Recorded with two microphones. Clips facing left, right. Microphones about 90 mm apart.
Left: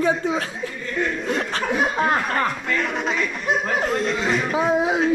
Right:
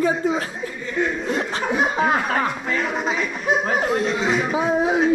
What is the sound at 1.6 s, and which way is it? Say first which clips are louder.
Speech: right 1 dB; centre (ahead or behind).